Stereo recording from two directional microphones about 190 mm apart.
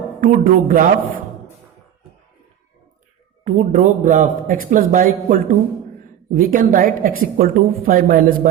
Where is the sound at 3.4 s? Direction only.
40° right (ahead or behind).